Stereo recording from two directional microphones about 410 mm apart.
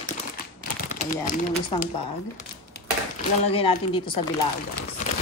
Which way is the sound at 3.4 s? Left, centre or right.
Centre.